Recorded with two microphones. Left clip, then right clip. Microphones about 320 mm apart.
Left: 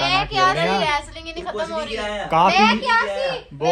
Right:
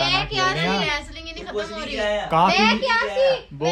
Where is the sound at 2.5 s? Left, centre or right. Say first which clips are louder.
Left 2 dB; centre.